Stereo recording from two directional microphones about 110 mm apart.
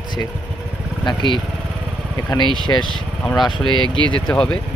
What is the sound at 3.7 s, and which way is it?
Speech, 45° left (ahead or behind).